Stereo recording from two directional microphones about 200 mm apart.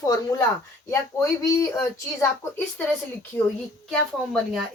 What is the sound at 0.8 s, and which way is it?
Speech, 15° left (ahead or behind).